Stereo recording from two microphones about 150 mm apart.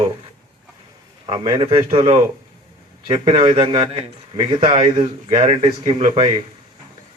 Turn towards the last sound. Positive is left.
turn(degrees=-35)  # may be behind; listen again after turning